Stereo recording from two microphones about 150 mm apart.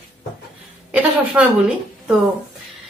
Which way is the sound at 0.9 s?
10° right (ahead or behind).